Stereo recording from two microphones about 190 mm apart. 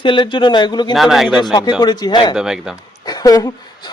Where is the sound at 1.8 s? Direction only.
20° left (ahead or behind).